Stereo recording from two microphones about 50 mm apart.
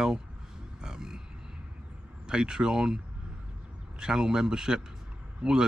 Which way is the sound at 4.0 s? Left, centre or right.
Centre.